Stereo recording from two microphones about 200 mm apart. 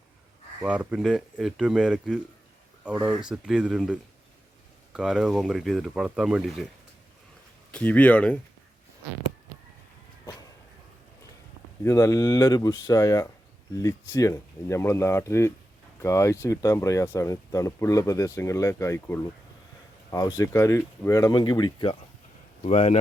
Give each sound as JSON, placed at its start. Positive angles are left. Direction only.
{"t": 0.6, "sound": "speech", "side_deg": -5}
{"t": 4.9, "sound": "speech", "side_deg": 0}
{"t": 7.7, "sound": "speech", "side_deg": 5}
{"t": 11.8, "sound": "speech", "side_deg": 15}
{"t": 22.6, "sound": "speech", "side_deg": 30}